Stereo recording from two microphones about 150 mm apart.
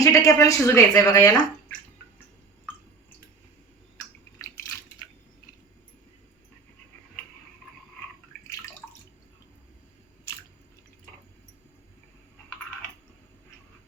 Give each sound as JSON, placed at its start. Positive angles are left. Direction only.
{"t": 0.0, "sound": "speech", "side_deg": 20}